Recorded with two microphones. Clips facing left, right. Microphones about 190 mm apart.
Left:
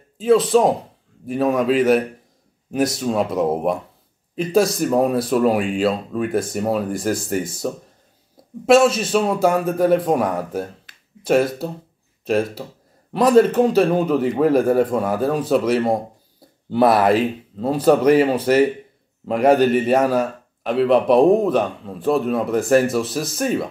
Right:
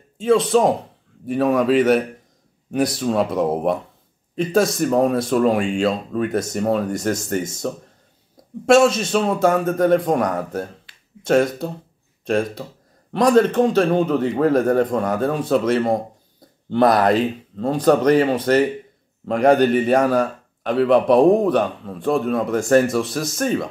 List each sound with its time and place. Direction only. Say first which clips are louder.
0.2 s a man's voice: left 1 dB; centre (ahead or behind)
4.7 s a man's voice: even; 5° left (ahead or behind)
8.6 s a man's voice: even; 5° left (ahead or behind)